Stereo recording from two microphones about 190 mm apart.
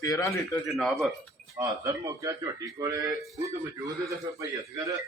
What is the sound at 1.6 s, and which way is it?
Speech, 20° right (ahead or behind).